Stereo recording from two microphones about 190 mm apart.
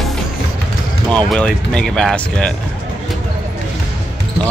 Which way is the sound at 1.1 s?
5° left (ahead or behind).